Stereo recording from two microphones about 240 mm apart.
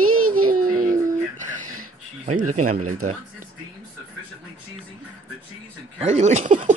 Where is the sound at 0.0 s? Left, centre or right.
Right.